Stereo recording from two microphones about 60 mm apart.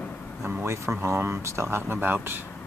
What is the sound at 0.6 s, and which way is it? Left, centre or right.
Speech, right.